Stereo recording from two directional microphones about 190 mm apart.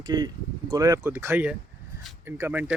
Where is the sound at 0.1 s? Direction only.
20° right (ahead or behind).